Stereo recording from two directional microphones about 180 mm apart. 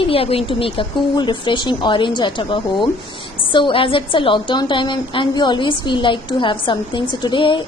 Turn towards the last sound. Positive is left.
turn(degrees=25)  # may be behind; listen again after turning